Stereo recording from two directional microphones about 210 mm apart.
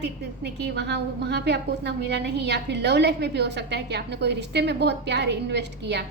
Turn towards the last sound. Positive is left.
turn(degrees=-55)  # may be behind; listen again after turning